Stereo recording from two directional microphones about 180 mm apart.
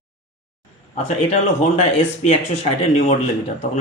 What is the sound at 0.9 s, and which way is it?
Speech, 40° left (ahead or behind).